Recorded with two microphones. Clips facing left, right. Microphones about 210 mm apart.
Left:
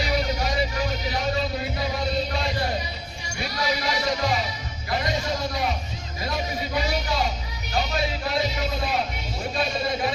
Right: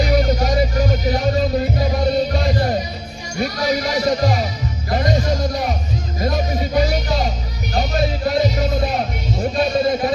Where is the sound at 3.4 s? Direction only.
45° right (ahead or behind).